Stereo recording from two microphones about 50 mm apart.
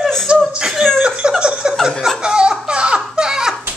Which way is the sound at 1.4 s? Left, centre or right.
Centre.